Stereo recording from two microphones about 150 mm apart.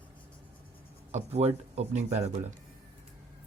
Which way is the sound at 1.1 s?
45° right (ahead or behind).